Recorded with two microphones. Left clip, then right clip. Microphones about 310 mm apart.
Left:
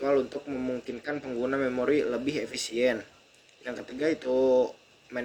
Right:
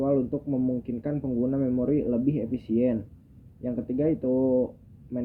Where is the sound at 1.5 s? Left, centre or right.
Centre.